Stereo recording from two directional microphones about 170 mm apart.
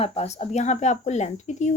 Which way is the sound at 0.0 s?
35° left (ahead or behind).